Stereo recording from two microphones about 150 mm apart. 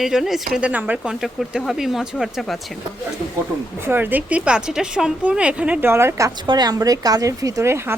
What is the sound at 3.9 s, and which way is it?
A woman's voice, 15° right (ahead or behind).